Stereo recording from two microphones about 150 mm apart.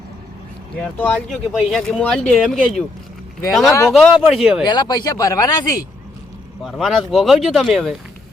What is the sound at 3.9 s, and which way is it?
Speech, centre (ahead or behind).